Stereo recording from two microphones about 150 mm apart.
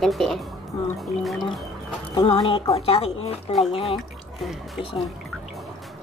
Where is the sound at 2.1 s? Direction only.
35° left (ahead or behind).